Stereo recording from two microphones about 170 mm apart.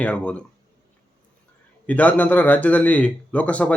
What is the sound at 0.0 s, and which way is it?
Speech, 10° left (ahead or behind).